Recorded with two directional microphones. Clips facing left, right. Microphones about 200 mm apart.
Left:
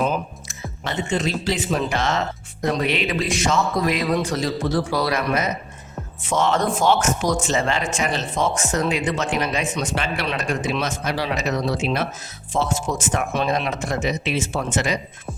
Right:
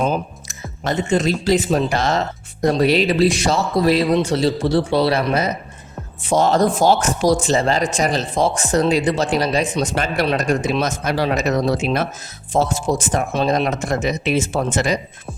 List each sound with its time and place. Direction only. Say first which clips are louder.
0.1 s speech: right 3 dB; 40° right (ahead or behind)